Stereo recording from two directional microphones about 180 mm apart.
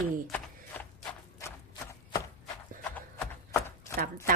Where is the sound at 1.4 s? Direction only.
15° left (ahead or behind).